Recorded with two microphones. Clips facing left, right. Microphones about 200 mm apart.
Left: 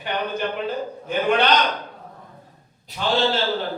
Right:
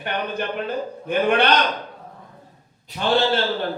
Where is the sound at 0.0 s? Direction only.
55° right (ahead or behind).